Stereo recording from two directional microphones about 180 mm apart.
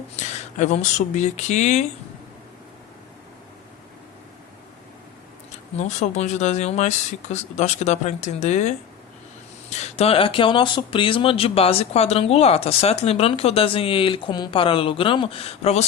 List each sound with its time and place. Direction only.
0.2 s speech: 40° left (ahead or behind)
5.7 s speech: 40° left (ahead or behind)